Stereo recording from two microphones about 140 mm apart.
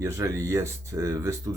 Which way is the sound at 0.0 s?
20° right (ahead or behind).